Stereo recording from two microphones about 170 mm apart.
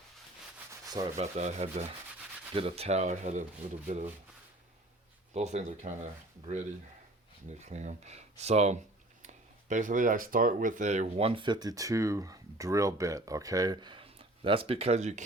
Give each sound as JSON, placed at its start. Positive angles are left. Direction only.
{"t": 0.9, "sound": "sanding", "side_deg": -20}
{"t": 1.1, "sound": "speech", "side_deg": -40}
{"t": 5.3, "sound": "speech", "side_deg": -40}
{"t": 7.6, "sound": "speech", "side_deg": -45}